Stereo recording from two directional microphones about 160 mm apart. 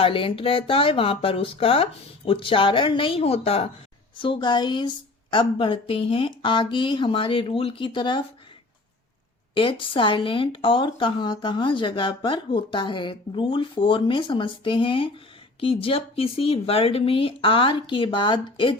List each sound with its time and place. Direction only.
0.0 s a woman's voice: 35° left (ahead or behind)
9.6 s a woman's voice: 35° left (ahead or behind)